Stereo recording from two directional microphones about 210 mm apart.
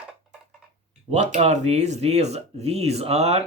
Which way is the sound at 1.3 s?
35° right (ahead or behind).